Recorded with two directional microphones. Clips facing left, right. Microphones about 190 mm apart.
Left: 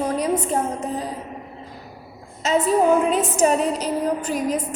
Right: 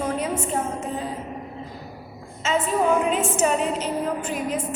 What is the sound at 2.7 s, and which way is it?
A woman's voice, 40° left (ahead or behind).